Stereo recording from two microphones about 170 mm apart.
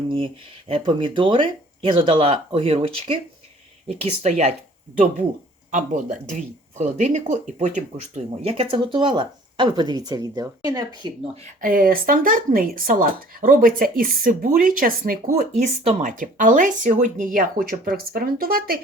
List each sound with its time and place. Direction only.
0.7 s speech: 30° right (ahead or behind)
4.2 s speech: 40° right (ahead or behind)
5.7 s speech: 45° right (ahead or behind); by 11.1 s 25° right (ahead or behind)
11.6 s speech: 60° right (ahead or behind)
15.6 s speech: 40° right (ahead or behind); by 18.8 s 60° right (ahead or behind)